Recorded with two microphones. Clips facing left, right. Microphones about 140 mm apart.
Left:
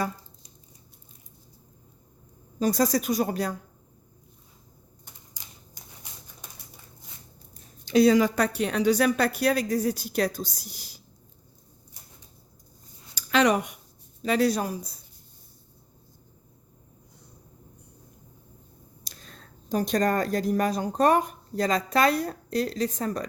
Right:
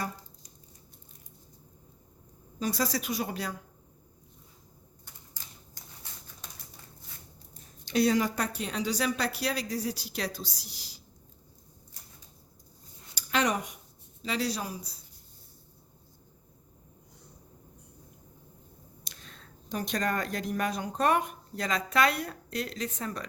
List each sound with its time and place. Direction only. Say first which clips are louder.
2.6 s speech: left 7 dB; 45° left (ahead or behind)
5.3 s a sound: left 1 dB; 15° left (ahead or behind)
8.1 s speech: left 6 dB; 85° left; by 11.0 s 50° left (ahead or behind)
13.3 s speech: left 7 dB; 85° left
14.2 s speech: left 8 dB; 50° left (ahead or behind)
19.0 s speech: left 4 dB; 40° left (ahead or behind)